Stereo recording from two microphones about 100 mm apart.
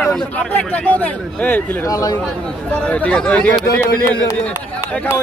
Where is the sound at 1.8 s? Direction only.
35° left (ahead or behind).